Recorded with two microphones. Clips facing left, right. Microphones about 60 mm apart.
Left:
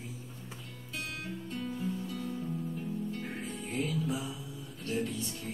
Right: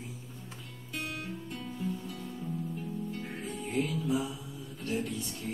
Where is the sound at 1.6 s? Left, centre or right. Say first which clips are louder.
Left 2 dB; centre.